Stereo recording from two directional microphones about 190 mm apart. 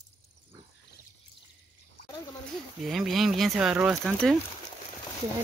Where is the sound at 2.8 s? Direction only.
Centre (ahead or behind).